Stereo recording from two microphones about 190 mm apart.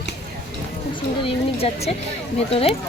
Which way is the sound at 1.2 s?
30° left (ahead or behind).